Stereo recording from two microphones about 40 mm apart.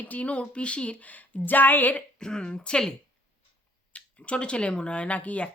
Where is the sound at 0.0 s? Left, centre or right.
Left.